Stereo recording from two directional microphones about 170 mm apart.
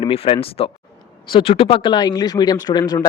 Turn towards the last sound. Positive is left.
turn(degrees=20)  # may be behind; listen again after turning